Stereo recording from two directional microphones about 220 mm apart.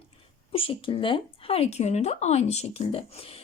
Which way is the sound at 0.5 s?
25° left (ahead or behind).